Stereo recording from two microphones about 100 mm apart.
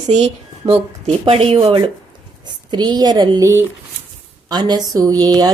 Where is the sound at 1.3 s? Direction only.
70° right (ahead or behind).